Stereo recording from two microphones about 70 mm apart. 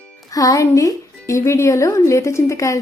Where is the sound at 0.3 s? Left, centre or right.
Left.